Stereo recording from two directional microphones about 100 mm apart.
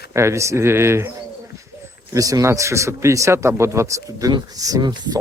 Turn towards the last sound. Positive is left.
turn(degrees=-45)  # may be behind; listen again after turning